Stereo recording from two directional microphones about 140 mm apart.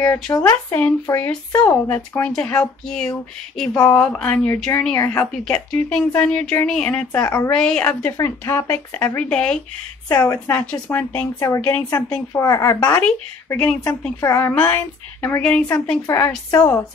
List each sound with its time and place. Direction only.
0.0 s a woman's voice: 20° left (ahead or behind)
10.0 s speech: 20° left (ahead or behind)
13.0 s a woman's voice: 10° left (ahead or behind)
14.2 s a woman's voice: 20° left (ahead or behind)
16.4 s speech: 25° left (ahead or behind)